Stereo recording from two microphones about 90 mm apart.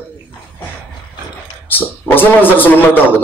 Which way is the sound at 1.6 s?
20° left (ahead or behind).